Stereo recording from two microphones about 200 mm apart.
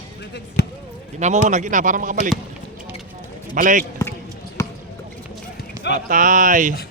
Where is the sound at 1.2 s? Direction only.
35° right (ahead or behind).